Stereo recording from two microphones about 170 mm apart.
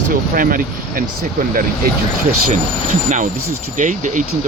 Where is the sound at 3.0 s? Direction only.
45° right (ahead or behind).